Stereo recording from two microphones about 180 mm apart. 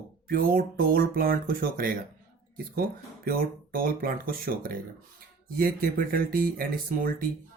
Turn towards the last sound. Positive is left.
turn(degrees=-55)  # may be behind; listen again after turning